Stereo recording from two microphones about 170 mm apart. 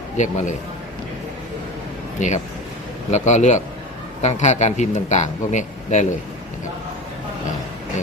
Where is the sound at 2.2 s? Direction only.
45° left (ahead or behind).